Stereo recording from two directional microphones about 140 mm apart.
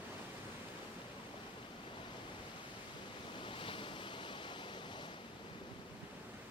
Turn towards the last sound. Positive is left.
turn(degrees=35)  # may be behind; listen again after turning